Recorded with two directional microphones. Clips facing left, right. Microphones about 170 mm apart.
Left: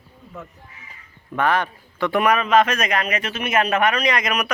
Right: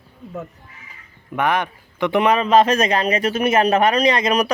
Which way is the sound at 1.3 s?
15° right (ahead or behind).